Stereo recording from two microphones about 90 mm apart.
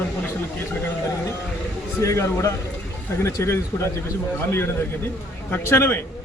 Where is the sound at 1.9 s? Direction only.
35° left (ahead or behind).